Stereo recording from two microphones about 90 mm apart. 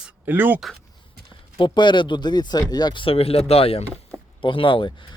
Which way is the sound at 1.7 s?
60° left (ahead or behind).